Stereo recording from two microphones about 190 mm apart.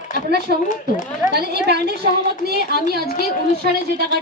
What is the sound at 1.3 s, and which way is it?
A woman's voice, 60° right (ahead or behind).